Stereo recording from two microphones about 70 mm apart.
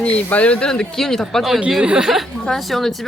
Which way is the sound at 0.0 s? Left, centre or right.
Centre.